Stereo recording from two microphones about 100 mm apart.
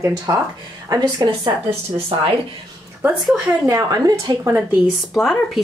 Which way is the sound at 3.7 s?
40° right (ahead or behind).